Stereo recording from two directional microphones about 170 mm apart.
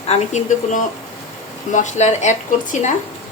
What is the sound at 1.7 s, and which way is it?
Speech, 45° left (ahead or behind).